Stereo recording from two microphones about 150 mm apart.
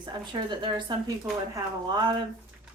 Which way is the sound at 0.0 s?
30° right (ahead or behind).